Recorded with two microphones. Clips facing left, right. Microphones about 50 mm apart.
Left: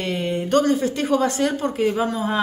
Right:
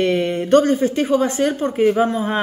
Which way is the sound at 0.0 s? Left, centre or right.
Right.